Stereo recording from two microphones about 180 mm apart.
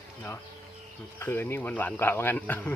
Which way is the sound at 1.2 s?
15° left (ahead or behind).